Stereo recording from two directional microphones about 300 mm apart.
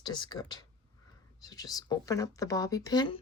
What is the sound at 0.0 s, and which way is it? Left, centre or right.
A woman's voice, centre.